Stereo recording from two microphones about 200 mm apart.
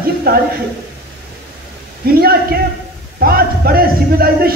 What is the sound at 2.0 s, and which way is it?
A man's voice, 50° right (ahead or behind).